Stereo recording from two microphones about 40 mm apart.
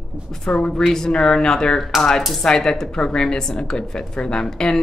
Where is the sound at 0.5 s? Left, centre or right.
Left.